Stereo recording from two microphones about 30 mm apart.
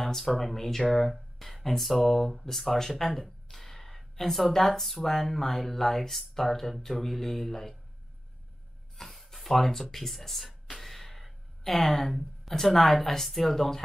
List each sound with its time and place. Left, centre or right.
0.0 s a sound: centre
0.4 s speech: centre
8.9 s speech: centre
10.7 s gasp: centre
11.7 s speech: centre